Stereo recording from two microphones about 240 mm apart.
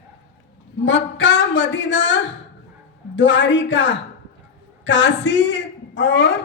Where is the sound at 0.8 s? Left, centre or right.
Left.